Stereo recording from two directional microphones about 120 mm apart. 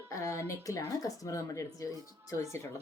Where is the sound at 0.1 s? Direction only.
25° left (ahead or behind).